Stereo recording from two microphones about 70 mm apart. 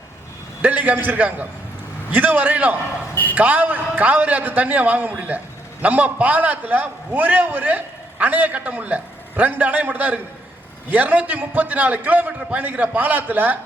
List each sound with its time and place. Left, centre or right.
0.6 s a man's voice: right